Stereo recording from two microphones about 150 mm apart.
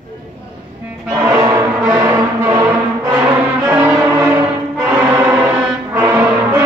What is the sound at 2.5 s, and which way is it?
Music, 20° right (ahead or behind).